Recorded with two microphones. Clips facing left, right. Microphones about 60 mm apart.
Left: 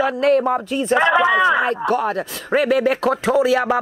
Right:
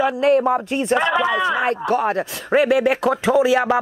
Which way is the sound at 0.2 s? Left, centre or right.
Right.